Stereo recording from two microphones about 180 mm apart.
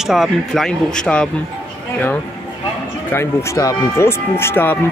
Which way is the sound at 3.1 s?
15° left (ahead or behind).